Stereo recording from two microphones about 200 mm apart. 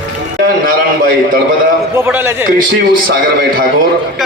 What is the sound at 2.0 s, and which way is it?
Speech, 10° right (ahead or behind).